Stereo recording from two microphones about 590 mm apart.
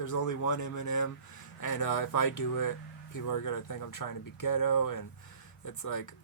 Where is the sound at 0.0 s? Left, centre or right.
Left.